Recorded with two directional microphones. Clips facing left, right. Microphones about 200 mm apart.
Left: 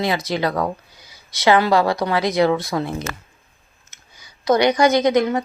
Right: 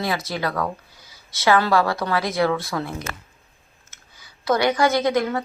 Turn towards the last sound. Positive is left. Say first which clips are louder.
# left 4 dB
turn(degrees=20)  # may be behind; listen again after turning